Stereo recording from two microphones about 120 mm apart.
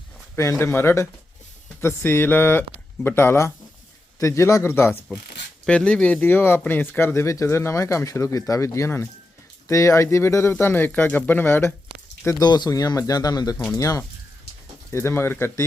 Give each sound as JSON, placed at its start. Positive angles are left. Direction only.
{"t": 0.6, "sound": "speech", "side_deg": 20}
{"t": 5.6, "sound": "speech", "side_deg": 10}
{"t": 12.4, "sound": "a man's voice", "side_deg": 35}